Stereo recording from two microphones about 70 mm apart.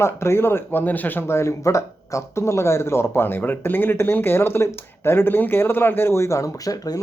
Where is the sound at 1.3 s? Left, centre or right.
Left.